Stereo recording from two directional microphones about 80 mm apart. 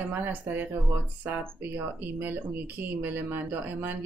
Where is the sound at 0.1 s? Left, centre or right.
Right.